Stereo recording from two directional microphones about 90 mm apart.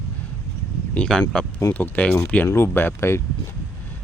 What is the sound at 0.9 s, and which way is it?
A man's voice, 10° left (ahead or behind).